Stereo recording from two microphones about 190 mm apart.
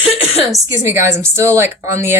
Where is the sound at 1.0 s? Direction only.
15° right (ahead or behind).